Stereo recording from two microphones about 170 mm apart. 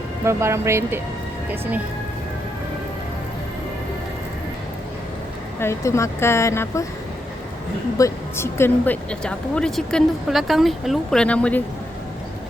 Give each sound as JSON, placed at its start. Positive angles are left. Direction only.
{"t": 0.3, "sound": "speech", "side_deg": -15}
{"t": 5.5, "sound": "a woman's voice", "side_deg": 15}
{"t": 7.9, "sound": "speech", "side_deg": 15}